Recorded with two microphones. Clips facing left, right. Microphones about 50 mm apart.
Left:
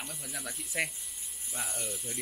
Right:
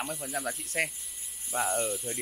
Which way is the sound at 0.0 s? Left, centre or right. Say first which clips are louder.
Right 8 dB; centre.